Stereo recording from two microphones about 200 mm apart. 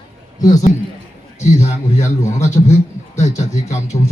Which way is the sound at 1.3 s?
35° left (ahead or behind).